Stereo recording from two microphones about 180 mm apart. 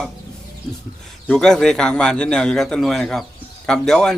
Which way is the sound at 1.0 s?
5° left (ahead or behind).